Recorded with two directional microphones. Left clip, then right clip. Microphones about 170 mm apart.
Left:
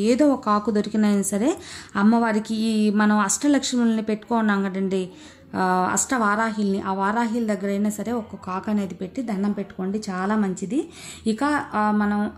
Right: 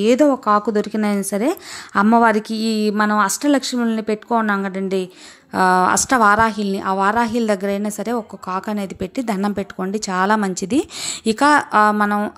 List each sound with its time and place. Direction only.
0.0 s a woman's voice: 25° right (ahead or behind)